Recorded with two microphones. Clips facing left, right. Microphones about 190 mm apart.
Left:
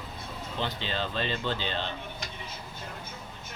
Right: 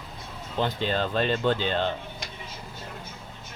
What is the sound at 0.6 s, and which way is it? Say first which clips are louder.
Speech: right 7 dB; 45° right (ahead or behind).